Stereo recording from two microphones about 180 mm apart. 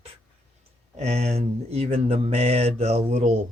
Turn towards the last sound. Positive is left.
turn(degrees=-40)  # may be behind; listen again after turning